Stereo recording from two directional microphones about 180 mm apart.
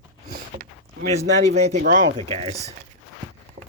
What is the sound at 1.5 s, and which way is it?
Speech, 40° right (ahead or behind).